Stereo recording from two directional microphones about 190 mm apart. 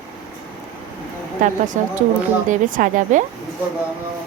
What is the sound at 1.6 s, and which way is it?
A woman's voice, 40° right (ahead or behind).